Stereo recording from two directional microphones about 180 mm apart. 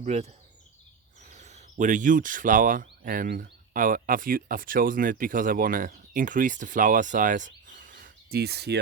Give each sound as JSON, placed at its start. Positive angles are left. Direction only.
{"t": 0.0, "sound": "speech", "side_deg": -40}
{"t": 1.3, "sound": "speech", "side_deg": -40}